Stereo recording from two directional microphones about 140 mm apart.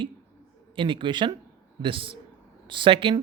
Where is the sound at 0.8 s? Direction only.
35° right (ahead or behind).